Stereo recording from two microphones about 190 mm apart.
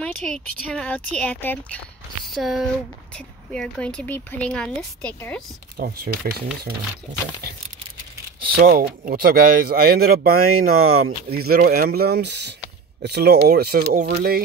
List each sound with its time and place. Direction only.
0.0 s speech: 5° left (ahead or behind)
5.8 s speech: 55° right (ahead or behind)
8.5 s speech: 45° right (ahead or behind)
10.8 s speech: 90° right
11.2 s speech: 55° right (ahead or behind)